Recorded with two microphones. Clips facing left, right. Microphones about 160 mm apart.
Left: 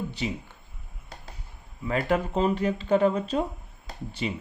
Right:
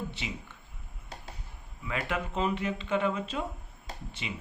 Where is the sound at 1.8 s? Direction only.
40° left (ahead or behind).